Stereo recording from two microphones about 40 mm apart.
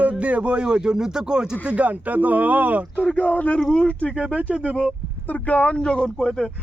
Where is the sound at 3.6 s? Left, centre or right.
Centre.